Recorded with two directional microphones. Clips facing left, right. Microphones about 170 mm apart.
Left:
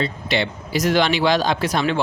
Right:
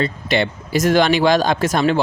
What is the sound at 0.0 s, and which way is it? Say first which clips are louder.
Speech: right 3 dB; 50° right (ahead or behind).